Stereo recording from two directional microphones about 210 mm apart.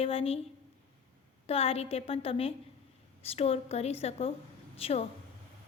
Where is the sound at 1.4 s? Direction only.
30° left (ahead or behind).